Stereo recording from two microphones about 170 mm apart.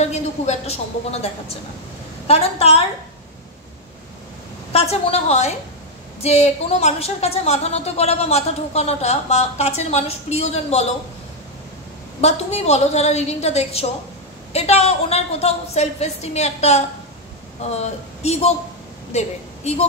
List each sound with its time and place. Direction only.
0.0 s a woman's voice: 40° left (ahead or behind)
4.7 s a woman's voice: 40° left (ahead or behind)
12.2 s a woman's voice: 40° left (ahead or behind)